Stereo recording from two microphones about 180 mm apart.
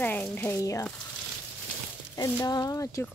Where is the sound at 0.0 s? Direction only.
10° left (ahead or behind).